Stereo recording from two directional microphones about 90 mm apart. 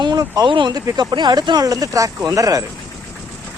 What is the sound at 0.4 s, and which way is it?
Speech, 60° right (ahead or behind).